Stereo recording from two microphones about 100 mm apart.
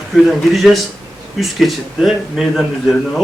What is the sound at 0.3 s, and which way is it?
A man's voice, centre (ahead or behind).